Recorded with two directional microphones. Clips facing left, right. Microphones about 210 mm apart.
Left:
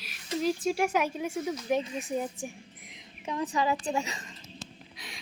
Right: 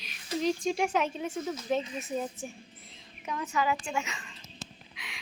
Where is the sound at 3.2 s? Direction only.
30° left (ahead or behind).